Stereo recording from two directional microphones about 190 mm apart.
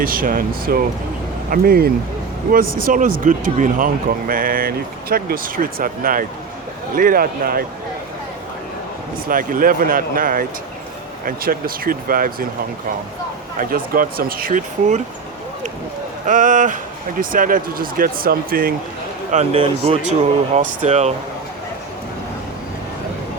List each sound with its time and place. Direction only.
0.0 s speech: 50° right (ahead or behind)
9.2 s speech: 45° right (ahead or behind)
13.6 s speech: 50° right (ahead or behind)
16.2 s speech: 40° right (ahead or behind)
19.3 s speech: 30° right (ahead or behind)